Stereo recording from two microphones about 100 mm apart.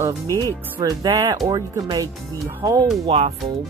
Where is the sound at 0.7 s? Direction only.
40° right (ahead or behind).